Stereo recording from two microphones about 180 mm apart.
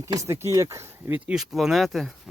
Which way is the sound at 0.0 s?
15° right (ahead or behind).